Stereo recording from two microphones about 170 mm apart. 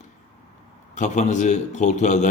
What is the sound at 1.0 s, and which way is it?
Speech, 45° left (ahead or behind).